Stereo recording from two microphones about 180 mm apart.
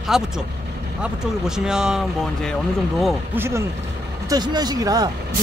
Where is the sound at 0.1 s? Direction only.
Centre (ahead or behind).